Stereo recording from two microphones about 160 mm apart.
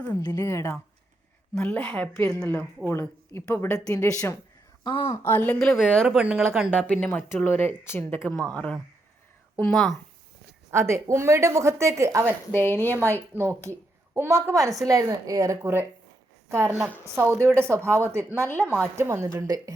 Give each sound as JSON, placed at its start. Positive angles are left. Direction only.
{"t": 0.2, "sound": "speech", "side_deg": 20}
{"t": 4.8, "sound": "a woman's voice", "side_deg": 30}
{"t": 5.2, "sound": "speech", "side_deg": 10}
{"t": 6.1, "sound": "speech", "side_deg": -5}
{"t": 6.7, "sound": "speech", "side_deg": 10}
{"t": 10.7, "sound": "a woman's voice", "side_deg": -15}
{"t": 12.5, "sound": "speech", "side_deg": 15}
{"t": 12.9, "sound": "a woman's voice", "side_deg": -15}